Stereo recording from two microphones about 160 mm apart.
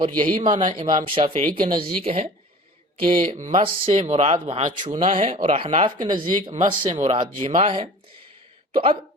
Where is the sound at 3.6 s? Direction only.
35° right (ahead or behind).